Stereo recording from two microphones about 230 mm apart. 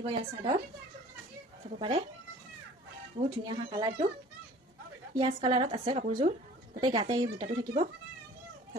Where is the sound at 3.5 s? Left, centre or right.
Centre.